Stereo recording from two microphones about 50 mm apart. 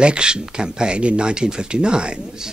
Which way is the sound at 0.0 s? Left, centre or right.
Centre.